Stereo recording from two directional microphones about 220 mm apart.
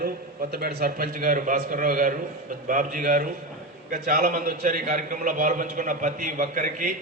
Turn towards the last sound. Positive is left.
turn(degrees=-40)  # may be behind; listen again after turning